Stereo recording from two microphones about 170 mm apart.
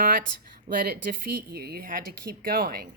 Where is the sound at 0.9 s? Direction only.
60° right (ahead or behind).